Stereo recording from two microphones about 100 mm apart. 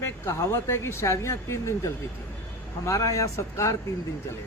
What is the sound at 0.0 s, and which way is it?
A man's voice, 25° left (ahead or behind).